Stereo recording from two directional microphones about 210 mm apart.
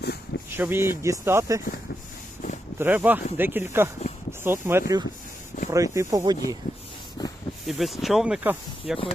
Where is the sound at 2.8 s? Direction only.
10° right (ahead or behind).